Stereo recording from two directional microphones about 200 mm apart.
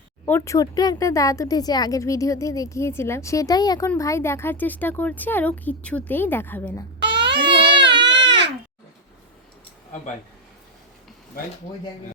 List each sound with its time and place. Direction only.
0.3 s speech: 15° left (ahead or behind)
7.0 s baby cry: 60° right (ahead or behind)